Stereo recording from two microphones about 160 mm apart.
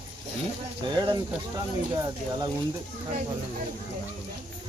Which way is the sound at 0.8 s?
25° right (ahead or behind).